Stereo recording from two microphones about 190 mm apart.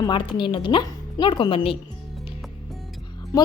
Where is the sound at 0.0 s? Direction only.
25° left (ahead or behind).